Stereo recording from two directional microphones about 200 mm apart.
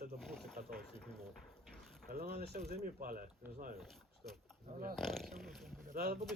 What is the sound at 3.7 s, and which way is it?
Speech, centre (ahead or behind).